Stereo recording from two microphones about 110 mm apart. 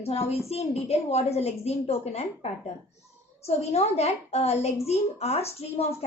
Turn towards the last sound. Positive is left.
turn(degrees=65)  # may be behind; listen again after turning